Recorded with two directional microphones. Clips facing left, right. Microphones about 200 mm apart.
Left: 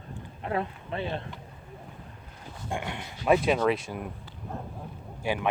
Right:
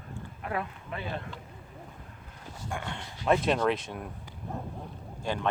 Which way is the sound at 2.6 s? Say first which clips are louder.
Left 3 dB; 15° left (ahead or behind).